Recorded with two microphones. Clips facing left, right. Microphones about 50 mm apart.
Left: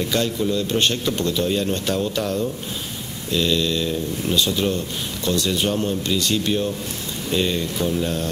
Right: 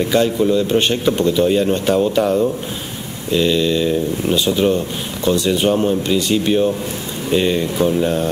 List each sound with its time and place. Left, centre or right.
0.0 s speech: centre